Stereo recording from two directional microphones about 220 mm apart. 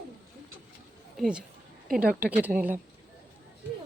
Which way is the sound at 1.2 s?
5° right (ahead or behind).